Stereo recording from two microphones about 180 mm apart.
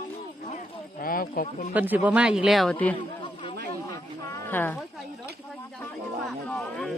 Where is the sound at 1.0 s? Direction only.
55° left (ahead or behind).